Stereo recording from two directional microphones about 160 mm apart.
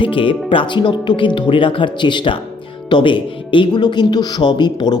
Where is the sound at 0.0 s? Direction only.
30° left (ahead or behind).